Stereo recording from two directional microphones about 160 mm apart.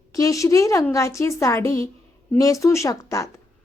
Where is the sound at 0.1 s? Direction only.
20° left (ahead or behind).